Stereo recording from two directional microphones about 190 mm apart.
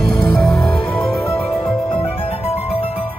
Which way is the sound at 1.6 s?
30° left (ahead or behind).